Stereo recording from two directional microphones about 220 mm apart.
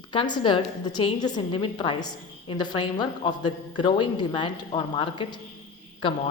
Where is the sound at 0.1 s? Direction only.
20° left (ahead or behind).